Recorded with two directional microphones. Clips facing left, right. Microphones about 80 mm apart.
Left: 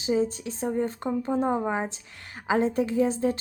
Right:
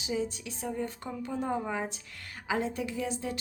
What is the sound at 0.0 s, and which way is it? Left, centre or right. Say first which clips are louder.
A woman's voice: left 8 dB; left.